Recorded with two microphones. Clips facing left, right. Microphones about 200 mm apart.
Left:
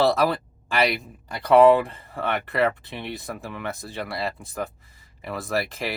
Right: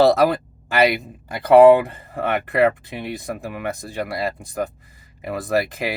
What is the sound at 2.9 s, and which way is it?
Speech, 10° right (ahead or behind).